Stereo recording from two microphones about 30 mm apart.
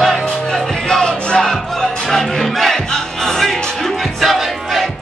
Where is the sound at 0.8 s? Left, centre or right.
Left.